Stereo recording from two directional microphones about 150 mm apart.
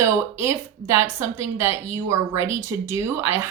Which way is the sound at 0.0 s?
20° right (ahead or behind).